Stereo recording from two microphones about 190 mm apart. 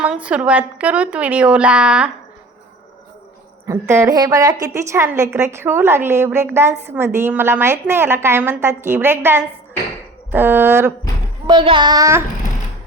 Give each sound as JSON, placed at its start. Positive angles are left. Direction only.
{"t": 0.0, "sound": "a woman's voice", "side_deg": -5}
{"t": 3.7, "sound": "a woman's voice", "side_deg": -15}
{"t": 11.4, "sound": "child singing", "side_deg": -25}